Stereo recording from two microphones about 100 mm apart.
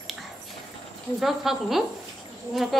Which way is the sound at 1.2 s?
Centre (ahead or behind).